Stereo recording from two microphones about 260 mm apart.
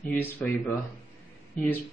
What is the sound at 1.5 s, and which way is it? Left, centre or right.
Speech, centre.